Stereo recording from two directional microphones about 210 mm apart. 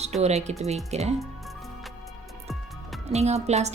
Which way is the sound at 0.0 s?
30° right (ahead or behind).